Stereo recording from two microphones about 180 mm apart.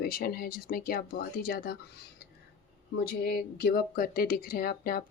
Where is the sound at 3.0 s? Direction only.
60° left (ahead or behind).